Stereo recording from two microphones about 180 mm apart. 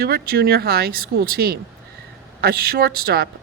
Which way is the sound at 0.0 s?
60° right (ahead or behind).